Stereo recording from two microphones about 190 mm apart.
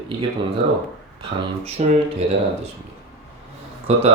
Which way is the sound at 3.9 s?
35° right (ahead or behind).